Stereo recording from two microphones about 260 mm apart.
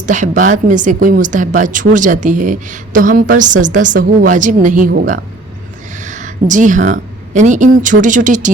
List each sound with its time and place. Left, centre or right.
0.0 s a woman's voice: right